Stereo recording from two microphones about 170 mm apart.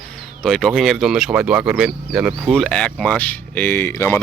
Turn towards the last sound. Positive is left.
turn(degrees=15)  # may be behind; listen again after turning